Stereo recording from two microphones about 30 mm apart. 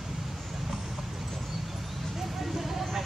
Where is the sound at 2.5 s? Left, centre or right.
Centre.